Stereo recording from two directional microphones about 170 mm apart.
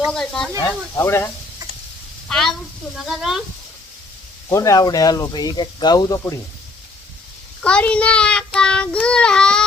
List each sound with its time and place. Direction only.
0.0 s speech: 5° left (ahead or behind)
0.9 s speech: 15° left (ahead or behind)
2.3 s speech: centre (ahead or behind)
4.4 s speech: 20° left (ahead or behind)
7.6 s child singing: 5° left (ahead or behind)